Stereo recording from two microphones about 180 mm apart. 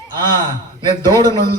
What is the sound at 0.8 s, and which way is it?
Speech, 25° right (ahead or behind).